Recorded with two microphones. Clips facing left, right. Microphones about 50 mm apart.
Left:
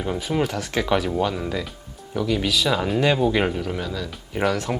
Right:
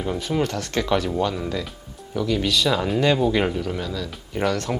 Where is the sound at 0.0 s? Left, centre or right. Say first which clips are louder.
Even; centre.